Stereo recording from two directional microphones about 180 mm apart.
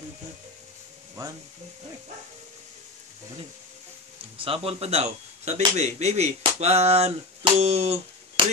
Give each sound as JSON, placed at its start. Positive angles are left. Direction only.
{"t": 4.4, "sound": "speech", "side_deg": -30}